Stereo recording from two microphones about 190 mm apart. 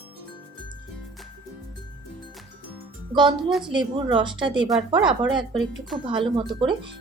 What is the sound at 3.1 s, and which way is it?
Speech, 25° right (ahead or behind).